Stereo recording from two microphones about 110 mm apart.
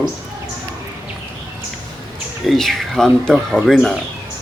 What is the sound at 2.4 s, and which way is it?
A man's voice, 5° left (ahead or behind).